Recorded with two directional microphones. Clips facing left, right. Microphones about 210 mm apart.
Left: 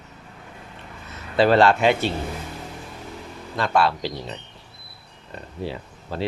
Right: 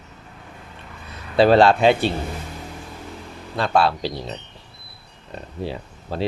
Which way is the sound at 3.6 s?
30° right (ahead or behind).